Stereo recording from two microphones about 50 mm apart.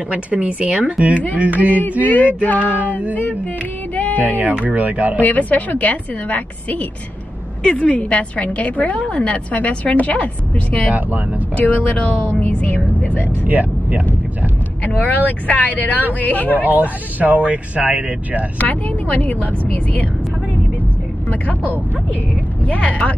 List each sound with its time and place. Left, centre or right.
0.1 s speech: right
1.8 s a woman's voice: left
3.9 s child singing: left
4.6 s speech: right
5.2 s a woman's voice: left
11.0 s speech: right
11.5 s a woman's voice: left
13.4 s speech: right
14.8 s a woman's voice: left
16.6 s speech: right
18.6 s a woman's voice: left
22.7 s a woman's voice: left